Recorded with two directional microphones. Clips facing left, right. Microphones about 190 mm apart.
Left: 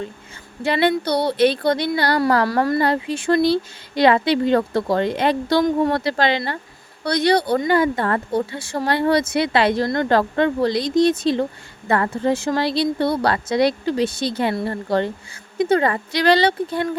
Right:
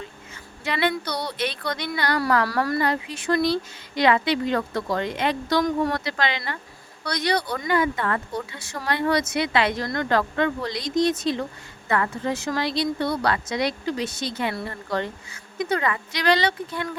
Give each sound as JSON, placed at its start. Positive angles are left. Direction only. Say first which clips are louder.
{"t": 0.6, "sound": "speech", "louder": "left 6 dB", "side_deg": 30}